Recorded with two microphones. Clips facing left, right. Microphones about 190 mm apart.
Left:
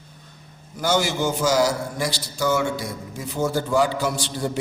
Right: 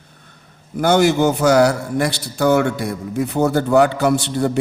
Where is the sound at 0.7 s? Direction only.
60° right (ahead or behind).